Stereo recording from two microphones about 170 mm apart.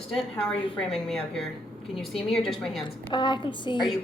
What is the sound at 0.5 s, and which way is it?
Speech, 30° left (ahead or behind).